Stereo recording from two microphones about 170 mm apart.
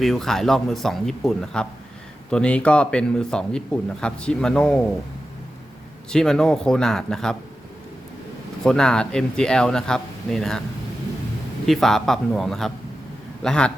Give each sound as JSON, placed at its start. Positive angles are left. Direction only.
{"t": 0.0, "sound": "speech", "side_deg": 0}
{"t": 6.1, "sound": "speech", "side_deg": 5}
{"t": 8.6, "sound": "speech", "side_deg": 5}
{"t": 11.6, "sound": "speech", "side_deg": 0}